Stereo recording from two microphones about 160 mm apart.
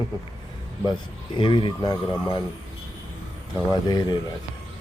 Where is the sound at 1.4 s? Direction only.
30° left (ahead or behind).